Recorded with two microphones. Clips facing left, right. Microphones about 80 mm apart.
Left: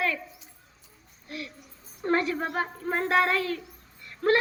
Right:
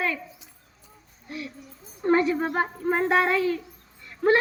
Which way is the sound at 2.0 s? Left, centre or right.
Centre.